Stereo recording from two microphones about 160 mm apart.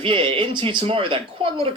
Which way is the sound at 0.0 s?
35° right (ahead or behind).